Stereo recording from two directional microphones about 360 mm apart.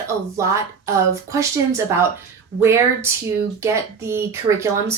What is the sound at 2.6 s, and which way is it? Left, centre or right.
Speech, centre.